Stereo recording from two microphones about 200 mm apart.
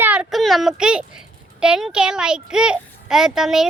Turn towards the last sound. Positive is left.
turn(degrees=0)  # may be behind; listen again after turning